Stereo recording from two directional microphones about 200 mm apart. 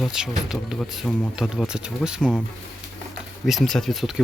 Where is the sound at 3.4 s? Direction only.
Centre (ahead or behind).